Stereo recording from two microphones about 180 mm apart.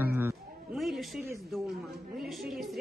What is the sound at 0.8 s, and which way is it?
A child's voice, centre (ahead or behind).